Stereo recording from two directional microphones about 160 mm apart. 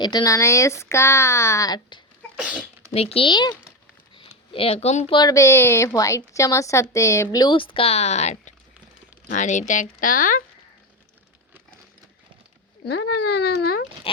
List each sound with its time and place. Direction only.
0.0 s speech: 25° left (ahead or behind)
2.3 s speech: 5° right (ahead or behind)
2.9 s speech: 40° left (ahead or behind)
4.5 s speech: 40° left (ahead or behind)
5.1 s speech: 20° left (ahead or behind); by 10.4 s 60° left (ahead or behind)
12.8 s speech: 90° left